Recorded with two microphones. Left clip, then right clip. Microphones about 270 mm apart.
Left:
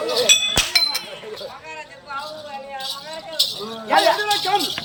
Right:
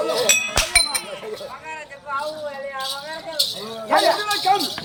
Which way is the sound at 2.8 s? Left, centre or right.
Centre.